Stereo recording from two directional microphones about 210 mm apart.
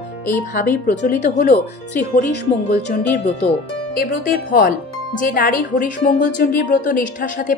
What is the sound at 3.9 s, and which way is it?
A woman's voice, 40° left (ahead or behind).